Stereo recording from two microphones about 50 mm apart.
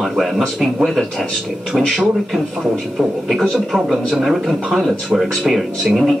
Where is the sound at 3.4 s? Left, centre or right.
Centre.